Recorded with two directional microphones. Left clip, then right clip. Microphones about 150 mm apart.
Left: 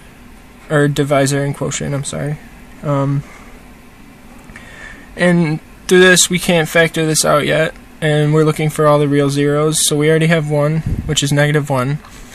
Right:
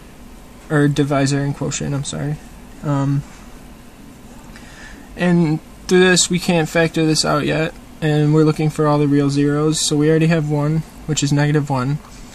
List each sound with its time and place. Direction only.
0.7 s speech: 15° left (ahead or behind)
5.1 s speech: 15° left (ahead or behind)